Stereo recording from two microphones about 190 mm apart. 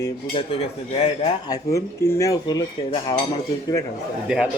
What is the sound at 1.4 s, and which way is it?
Cutlery, 15° left (ahead or behind).